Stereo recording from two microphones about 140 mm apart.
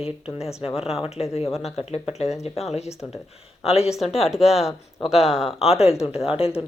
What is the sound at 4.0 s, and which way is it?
Speech, centre (ahead or behind).